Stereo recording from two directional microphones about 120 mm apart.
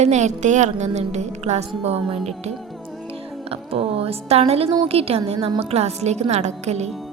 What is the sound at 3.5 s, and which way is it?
A woman's voice, 55° right (ahead or behind).